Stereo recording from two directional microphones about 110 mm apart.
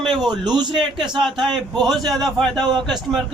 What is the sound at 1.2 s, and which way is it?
Speech, centre (ahead or behind).